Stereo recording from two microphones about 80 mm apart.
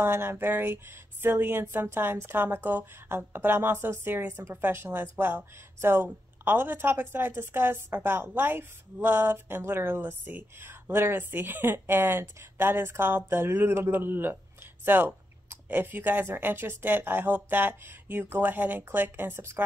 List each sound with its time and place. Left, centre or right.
0.0 s a woman's voice: right